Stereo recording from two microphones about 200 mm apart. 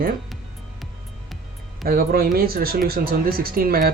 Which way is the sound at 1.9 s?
50° right (ahead or behind).